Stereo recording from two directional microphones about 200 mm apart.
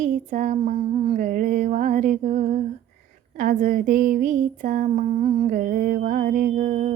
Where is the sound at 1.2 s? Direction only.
40° right (ahead or behind).